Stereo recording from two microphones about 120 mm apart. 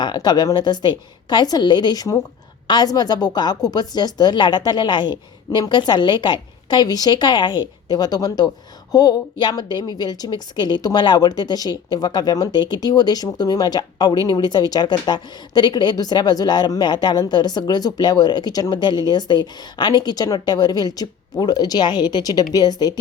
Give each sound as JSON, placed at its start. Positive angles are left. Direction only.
{"t": 0.0, "sound": "a woman's voice", "side_deg": 40}